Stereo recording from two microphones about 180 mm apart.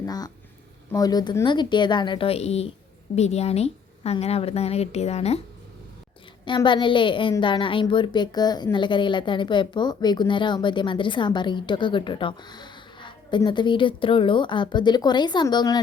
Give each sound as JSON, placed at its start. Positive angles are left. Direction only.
{"t": 0.0, "sound": "a woman's voice", "side_deg": 20}
{"t": 6.4, "sound": "a woman's voice", "side_deg": 25}